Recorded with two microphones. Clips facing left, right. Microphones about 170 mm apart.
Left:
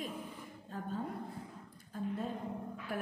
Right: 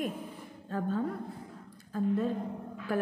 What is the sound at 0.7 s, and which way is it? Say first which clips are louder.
Speech: right 8 dB; 85° right.